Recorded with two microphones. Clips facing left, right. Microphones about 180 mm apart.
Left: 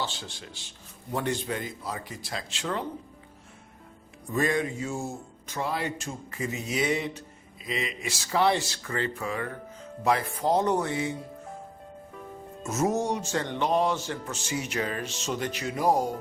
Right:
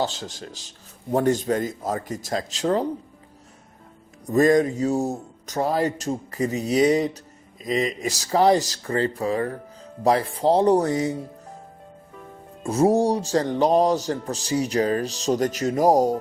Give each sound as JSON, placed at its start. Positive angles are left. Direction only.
{"t": 0.0, "sound": "speech", "side_deg": -40}
{"t": 4.3, "sound": "speech", "side_deg": -40}
{"t": 12.6, "sound": "speech", "side_deg": -30}